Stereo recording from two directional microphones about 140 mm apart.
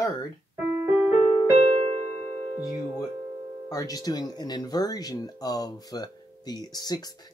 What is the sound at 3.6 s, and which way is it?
Speech, 25° left (ahead or behind).